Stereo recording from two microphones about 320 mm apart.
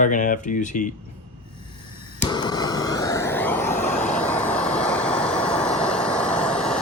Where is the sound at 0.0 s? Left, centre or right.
Left.